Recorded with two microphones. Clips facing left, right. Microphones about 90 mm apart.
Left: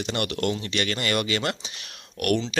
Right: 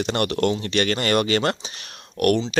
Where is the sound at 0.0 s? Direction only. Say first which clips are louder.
Right 5 dB; 40° right (ahead or behind).